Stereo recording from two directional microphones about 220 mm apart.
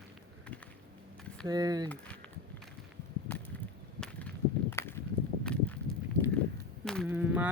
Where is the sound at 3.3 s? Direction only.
5° left (ahead or behind).